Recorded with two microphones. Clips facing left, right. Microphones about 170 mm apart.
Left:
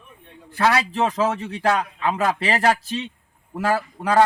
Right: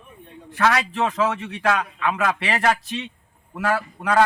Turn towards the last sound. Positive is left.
turn(degrees=35)  # may be behind; listen again after turning